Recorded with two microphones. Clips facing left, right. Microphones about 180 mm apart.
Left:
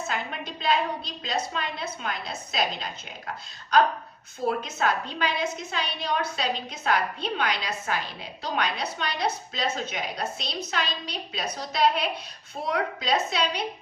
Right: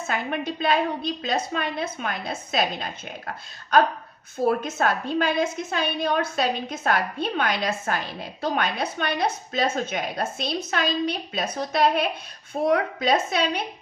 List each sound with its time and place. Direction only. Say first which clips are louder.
0.1 s a woman's voice: right 5 dB; 55° right (ahead or behind)